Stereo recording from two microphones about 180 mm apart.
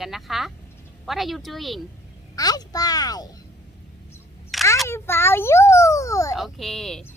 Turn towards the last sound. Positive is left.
turn(degrees=0)  # may be behind; listen again after turning